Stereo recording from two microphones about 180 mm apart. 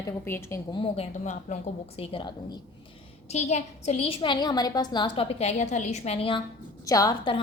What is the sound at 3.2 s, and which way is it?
A woman's voice, 40° left (ahead or behind).